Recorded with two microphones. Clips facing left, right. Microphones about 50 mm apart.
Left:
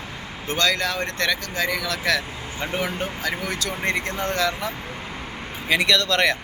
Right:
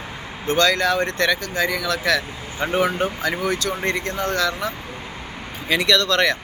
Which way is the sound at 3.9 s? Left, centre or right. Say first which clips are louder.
Even; centre.